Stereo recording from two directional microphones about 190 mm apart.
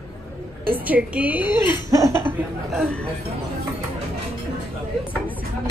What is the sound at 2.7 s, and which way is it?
Speech, centre (ahead or behind).